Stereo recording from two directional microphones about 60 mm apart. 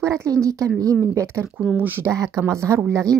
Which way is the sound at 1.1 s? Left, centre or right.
Right.